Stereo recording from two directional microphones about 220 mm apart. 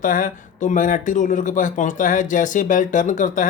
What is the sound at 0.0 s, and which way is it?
Speech, 35° left (ahead or behind).